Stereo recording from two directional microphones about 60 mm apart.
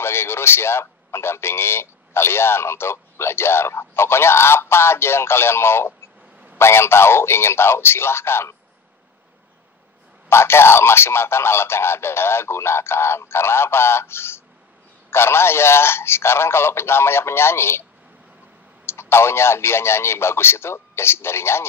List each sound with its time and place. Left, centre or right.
0.0 s a man's voice: left
10.3 s a man's voice: left
18.9 s a man's voice: left